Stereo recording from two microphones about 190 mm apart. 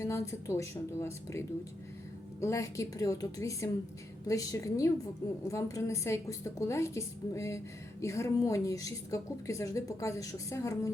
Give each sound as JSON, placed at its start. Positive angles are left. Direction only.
{"t": 0.0, "sound": "a woman's voice", "side_deg": 15}